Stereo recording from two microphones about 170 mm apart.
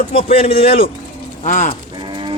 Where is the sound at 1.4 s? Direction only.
45° left (ahead or behind).